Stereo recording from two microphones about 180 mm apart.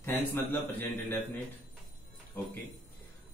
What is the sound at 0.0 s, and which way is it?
Speech, 10° left (ahead or behind).